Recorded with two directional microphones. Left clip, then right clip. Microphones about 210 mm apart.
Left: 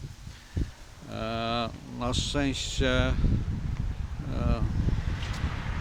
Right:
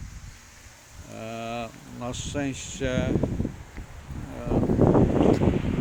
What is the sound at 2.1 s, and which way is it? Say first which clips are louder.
Speech: left 2 dB; 5° left (ahead or behind).